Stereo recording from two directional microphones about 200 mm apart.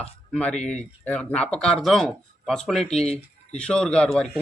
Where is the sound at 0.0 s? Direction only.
5° left (ahead or behind).